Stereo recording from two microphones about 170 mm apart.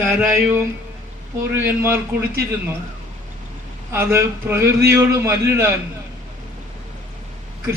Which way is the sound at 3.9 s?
15° right (ahead or behind).